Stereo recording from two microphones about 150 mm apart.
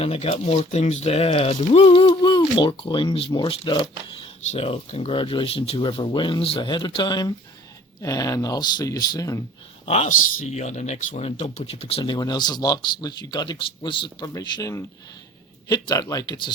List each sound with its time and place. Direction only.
0.0 s speech: 40° left (ahead or behind); by 9.4 s 25° left (ahead or behind)
9.8 s a man's voice: 45° left (ahead or behind); by 16.5 s 25° left (ahead or behind)